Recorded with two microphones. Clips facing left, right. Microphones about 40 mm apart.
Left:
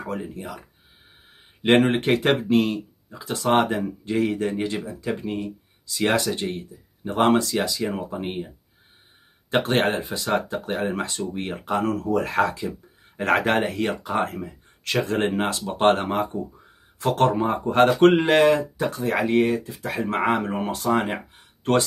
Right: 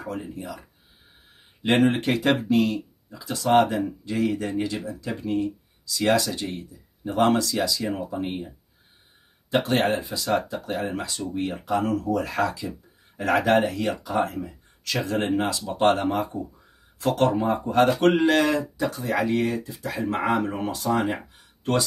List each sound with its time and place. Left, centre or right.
0.0 s speech: left
1.7 s speech: left
9.5 s speech: left